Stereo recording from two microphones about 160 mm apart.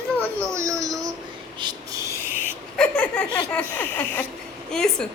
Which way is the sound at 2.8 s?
5° left (ahead or behind).